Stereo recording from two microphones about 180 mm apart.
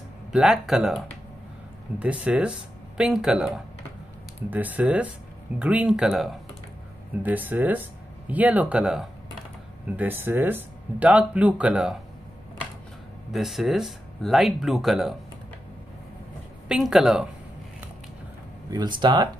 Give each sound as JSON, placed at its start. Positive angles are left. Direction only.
{"t": 0.3, "sound": "speech", "side_deg": -5}
{"t": 13.3, "sound": "speech", "side_deg": 0}
{"t": 16.6, "sound": "speech", "side_deg": -5}
{"t": 18.7, "sound": "speech", "side_deg": -25}